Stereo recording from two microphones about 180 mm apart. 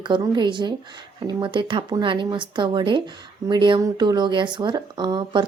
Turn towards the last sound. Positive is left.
turn(degrees=-25)  # may be behind; listen again after turning